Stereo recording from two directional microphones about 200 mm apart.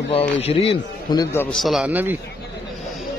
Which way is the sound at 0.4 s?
30° left (ahead or behind).